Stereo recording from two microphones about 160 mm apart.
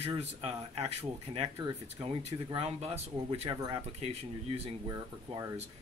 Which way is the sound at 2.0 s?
40° right (ahead or behind).